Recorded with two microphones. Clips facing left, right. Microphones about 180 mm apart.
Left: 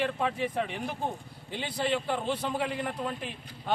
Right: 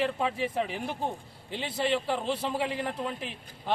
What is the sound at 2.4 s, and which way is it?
Speech, centre (ahead or behind).